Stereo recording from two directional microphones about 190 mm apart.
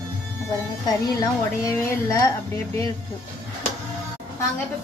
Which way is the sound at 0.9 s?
20° left (ahead or behind).